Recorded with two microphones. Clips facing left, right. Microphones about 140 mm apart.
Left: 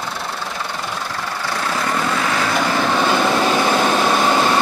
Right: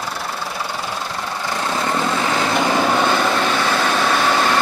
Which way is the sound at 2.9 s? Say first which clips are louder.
Left 1 dB; 5° left (ahead or behind).